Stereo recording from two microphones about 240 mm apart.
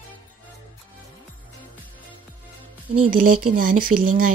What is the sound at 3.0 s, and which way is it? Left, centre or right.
Speech, right.